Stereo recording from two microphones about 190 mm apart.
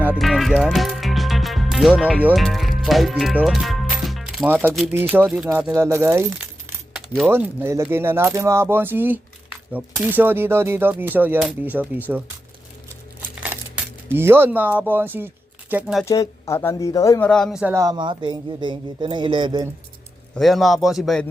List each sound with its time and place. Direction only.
0.0 s speech: 5° right (ahead or behind)
13.4 s a man's voice: 10° right (ahead or behind)
16.0 s speech: 15° left (ahead or behind)
17.2 s a man's voice: 5° left (ahead or behind); by 19.7 s 20° right (ahead or behind)
20.3 s a man's voice: centre (ahead or behind)